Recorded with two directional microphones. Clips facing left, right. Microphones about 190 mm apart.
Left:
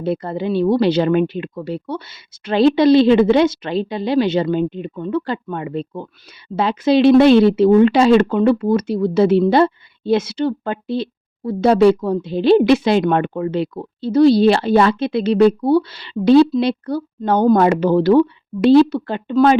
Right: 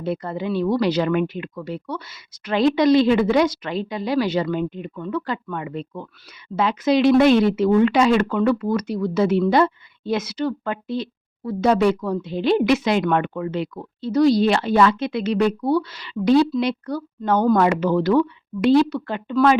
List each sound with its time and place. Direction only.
0.0 s a woman's voice: 30° left (ahead or behind)